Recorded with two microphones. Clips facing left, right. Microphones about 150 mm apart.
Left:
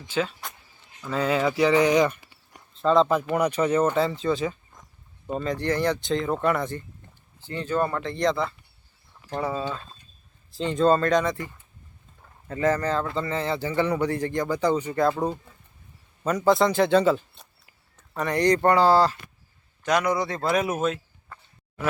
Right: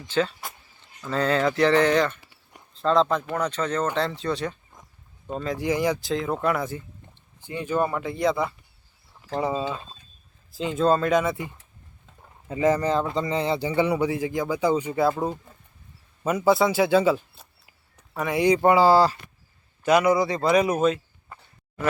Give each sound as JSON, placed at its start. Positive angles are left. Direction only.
{"t": 0.1, "sound": "speech", "side_deg": 5}
{"t": 2.7, "sound": "a man's voice", "side_deg": 0}
{"t": 10.6, "sound": "a man's voice", "side_deg": -5}